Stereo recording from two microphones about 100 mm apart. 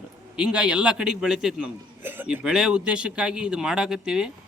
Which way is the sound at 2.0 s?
20° right (ahead or behind).